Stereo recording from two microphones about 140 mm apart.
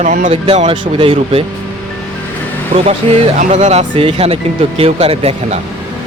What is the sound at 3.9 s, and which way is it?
Speech, 40° right (ahead or behind).